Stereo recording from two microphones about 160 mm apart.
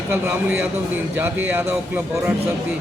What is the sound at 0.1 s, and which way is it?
A man's voice, 10° right (ahead or behind).